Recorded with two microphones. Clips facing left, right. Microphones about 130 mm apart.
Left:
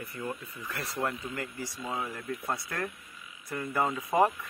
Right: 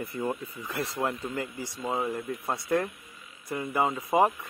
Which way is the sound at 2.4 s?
20° right (ahead or behind).